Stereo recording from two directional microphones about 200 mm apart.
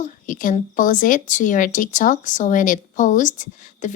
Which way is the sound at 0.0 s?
40° left (ahead or behind).